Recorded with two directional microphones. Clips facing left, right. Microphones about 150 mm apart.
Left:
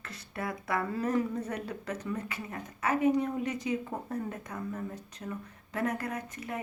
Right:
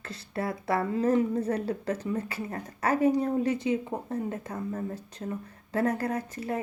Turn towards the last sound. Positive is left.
turn(degrees=-35)  # may be behind; listen again after turning